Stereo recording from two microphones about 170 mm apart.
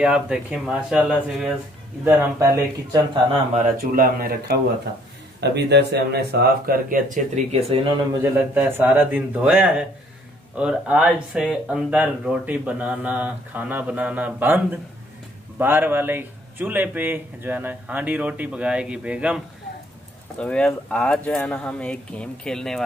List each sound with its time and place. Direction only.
0.0 s speech: 5° right (ahead or behind)
2.0 s speech: 20° right (ahead or behind)
3.5 s speech: 60° right (ahead or behind)
5.4 s speech: 80° right; by 7.4 s 55° right (ahead or behind)
7.7 s speech: 25° right (ahead or behind)
8.2 s speech: 15° right (ahead or behind)
20.3 s speech: 5° left (ahead or behind)